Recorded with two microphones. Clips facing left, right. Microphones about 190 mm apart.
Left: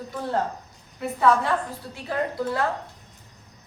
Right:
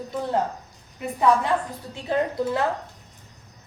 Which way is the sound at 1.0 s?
15° right (ahead or behind).